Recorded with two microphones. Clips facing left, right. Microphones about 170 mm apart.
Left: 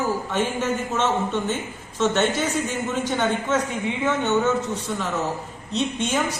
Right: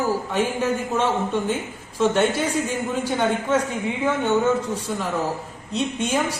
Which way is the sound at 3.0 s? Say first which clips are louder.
Right 1 dB; 10° right (ahead or behind).